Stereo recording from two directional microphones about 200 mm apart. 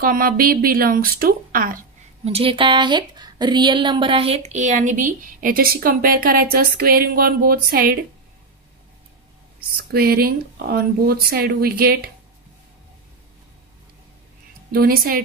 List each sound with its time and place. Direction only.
0.0 s speech: 45° right (ahead or behind)
2.2 s a woman's voice: 30° right (ahead or behind); by 7.9 s 50° right (ahead or behind)
9.6 s speech: 50° right (ahead or behind)
14.7 s speech: 50° right (ahead or behind)